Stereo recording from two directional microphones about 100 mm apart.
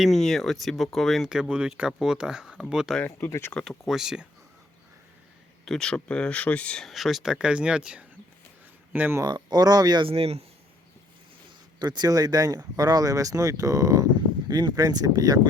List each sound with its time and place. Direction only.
0.0 s speech: 5° left (ahead or behind)
3.0 s speech: 20° left (ahead or behind)
3.5 s speech: centre (ahead or behind)
5.6 s speech: 5° left (ahead or behind); by 8.0 s 10° right (ahead or behind)
8.9 s speech: 20° right (ahead or behind)
9.2 s speech: 45° right (ahead or behind)
10.1 s a man's voice: 80° right
11.8 s speech: 45° right (ahead or behind)